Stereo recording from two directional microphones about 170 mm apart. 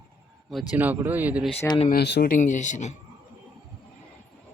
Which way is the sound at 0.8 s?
10° right (ahead or behind).